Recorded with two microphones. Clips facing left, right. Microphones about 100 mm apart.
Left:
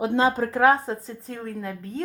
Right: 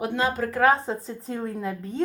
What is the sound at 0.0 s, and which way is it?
Speech, 30° left (ahead or behind).